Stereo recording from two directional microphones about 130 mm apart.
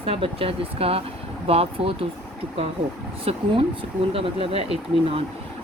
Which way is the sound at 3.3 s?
50° right (ahead or behind).